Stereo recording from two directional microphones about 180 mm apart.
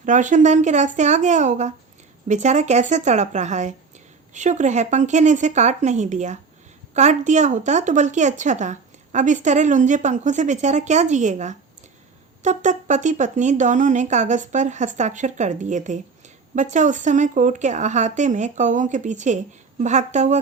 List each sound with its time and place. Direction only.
0.0 s speech: 45° right (ahead or behind)